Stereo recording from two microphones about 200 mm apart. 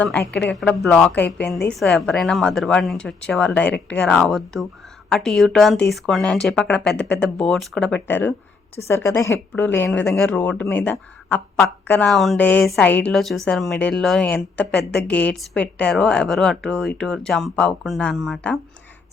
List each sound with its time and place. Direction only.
0.0 s speech: 5° left (ahead or behind)